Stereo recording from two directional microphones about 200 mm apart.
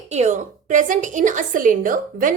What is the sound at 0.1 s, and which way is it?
A woman's voice, 35° right (ahead or behind).